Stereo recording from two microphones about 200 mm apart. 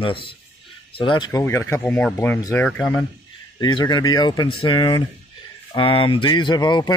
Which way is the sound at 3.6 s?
20° left (ahead or behind).